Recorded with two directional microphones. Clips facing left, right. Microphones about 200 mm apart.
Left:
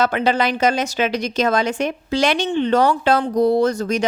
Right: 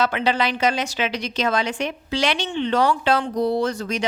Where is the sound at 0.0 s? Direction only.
45° left (ahead or behind).